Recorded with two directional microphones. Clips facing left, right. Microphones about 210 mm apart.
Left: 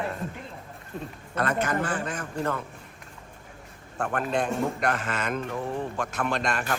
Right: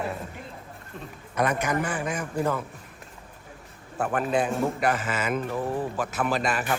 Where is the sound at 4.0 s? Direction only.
5° right (ahead or behind).